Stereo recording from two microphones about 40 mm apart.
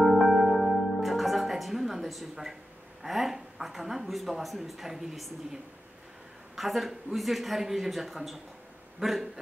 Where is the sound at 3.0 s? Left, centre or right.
Centre.